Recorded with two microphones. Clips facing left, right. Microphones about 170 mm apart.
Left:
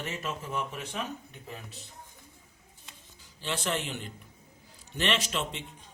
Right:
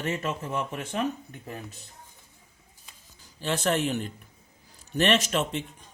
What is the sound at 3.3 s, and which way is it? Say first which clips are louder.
Speech: right 6 dB; 45° right (ahead or behind).